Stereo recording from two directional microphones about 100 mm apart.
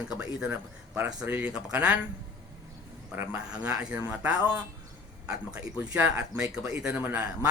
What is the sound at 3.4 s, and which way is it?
Speech, 10° right (ahead or behind).